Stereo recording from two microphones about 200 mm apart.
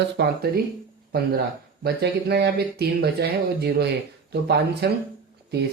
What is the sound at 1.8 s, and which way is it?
Speech, 55° right (ahead or behind).